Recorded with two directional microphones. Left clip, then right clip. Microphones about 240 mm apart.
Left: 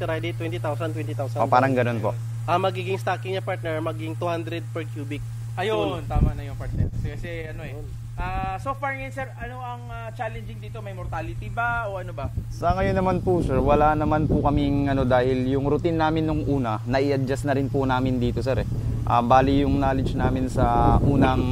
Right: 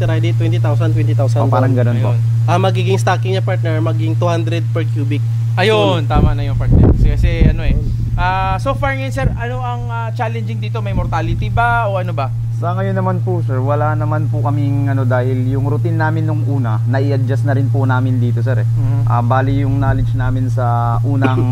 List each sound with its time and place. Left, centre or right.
0.0 s a man's voice: left
1.4 s a man's voice: left; by 5.2 s centre
5.6 s speech: centre
8.2 s speech: centre
11.0 s speech: centre
12.8 s a man's voice: left
19.0 s speech: left